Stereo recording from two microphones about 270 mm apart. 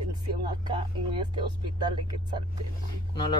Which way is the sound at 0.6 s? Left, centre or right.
Centre.